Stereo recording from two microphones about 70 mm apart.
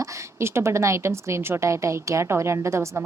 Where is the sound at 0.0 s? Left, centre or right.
Right.